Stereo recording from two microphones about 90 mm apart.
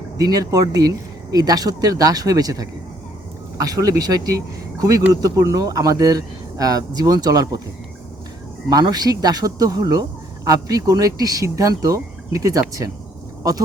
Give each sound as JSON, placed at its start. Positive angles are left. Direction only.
{"t": 0.2, "sound": "speech", "side_deg": -45}
{"t": 8.7, "sound": "speech", "side_deg": -50}